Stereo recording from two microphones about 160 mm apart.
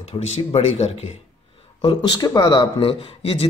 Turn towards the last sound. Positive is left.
turn(degrees=35)  # may be behind; listen again after turning